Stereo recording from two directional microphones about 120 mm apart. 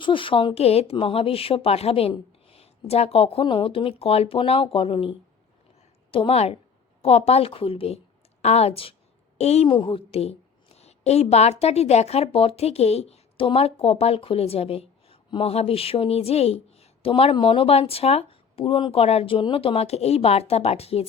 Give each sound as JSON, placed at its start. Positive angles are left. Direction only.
{"t": 0.0, "sound": "speech", "side_deg": 45}
{"t": 8.4, "sound": "speech", "side_deg": 60}
{"t": 9.4, "sound": "a woman's voice", "side_deg": 60}